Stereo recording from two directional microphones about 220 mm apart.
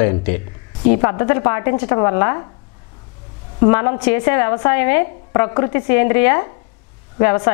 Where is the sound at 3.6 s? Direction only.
15° left (ahead or behind).